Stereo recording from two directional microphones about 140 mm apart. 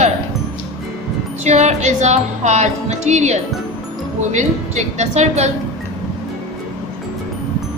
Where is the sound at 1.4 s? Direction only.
50° right (ahead or behind).